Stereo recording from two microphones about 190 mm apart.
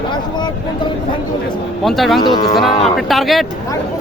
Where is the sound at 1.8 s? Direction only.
Centre (ahead or behind).